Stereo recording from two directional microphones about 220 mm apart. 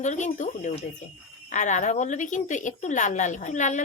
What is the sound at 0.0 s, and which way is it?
Speech, 35° left (ahead or behind).